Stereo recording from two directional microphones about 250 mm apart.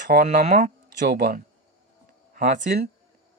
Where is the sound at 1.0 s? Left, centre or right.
Right.